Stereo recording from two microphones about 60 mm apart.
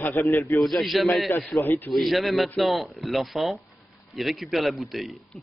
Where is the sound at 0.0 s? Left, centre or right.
Left.